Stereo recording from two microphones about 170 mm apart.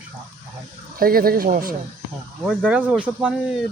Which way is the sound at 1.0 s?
60° right (ahead or behind).